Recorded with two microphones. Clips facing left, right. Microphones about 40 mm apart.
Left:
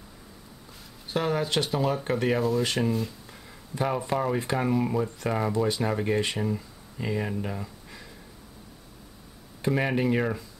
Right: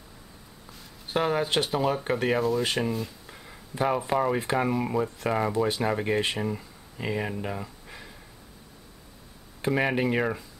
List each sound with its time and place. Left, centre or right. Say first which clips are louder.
1.0 s speech: right 1 dB; centre
9.7 s speech: even; centre